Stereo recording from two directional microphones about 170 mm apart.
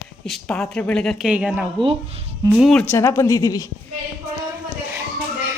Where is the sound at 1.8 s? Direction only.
30° right (ahead or behind).